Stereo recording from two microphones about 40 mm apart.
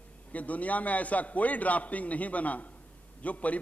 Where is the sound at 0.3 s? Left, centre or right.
Left.